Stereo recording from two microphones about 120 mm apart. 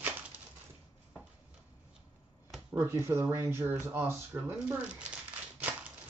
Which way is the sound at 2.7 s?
20° right (ahead or behind).